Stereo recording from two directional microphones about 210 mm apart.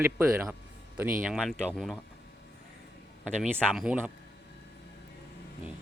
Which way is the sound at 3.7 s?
5° right (ahead or behind).